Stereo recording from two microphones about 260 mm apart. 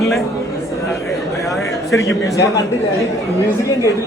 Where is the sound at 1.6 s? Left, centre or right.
Centre.